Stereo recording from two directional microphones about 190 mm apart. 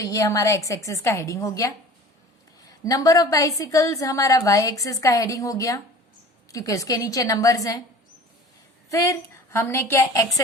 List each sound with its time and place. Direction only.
0.0 s a woman's voice: 15° left (ahead or behind)
8.9 s a woman's voice: 15° left (ahead or behind)